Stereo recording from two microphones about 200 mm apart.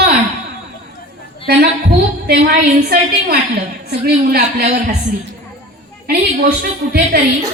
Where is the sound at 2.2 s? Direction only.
50° right (ahead or behind).